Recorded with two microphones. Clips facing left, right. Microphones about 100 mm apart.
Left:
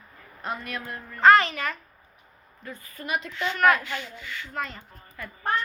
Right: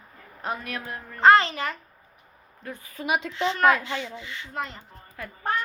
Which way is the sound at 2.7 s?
80° right.